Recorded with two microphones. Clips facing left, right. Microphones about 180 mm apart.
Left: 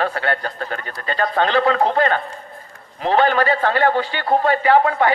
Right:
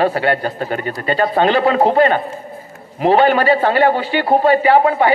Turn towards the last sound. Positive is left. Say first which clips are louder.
# right 4 dB
turn(degrees=-15)  # may be behind; listen again after turning